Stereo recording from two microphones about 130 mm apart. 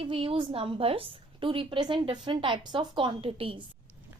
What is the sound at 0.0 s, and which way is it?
A woman's voice, 45° right (ahead or behind).